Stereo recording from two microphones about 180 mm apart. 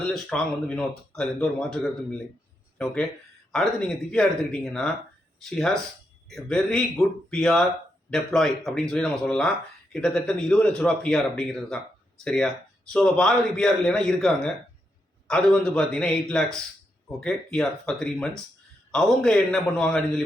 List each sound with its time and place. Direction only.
0.1 s speech: 5° left (ahead or behind)